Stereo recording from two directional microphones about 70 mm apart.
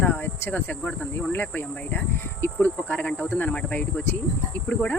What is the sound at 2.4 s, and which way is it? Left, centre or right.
Speech, left.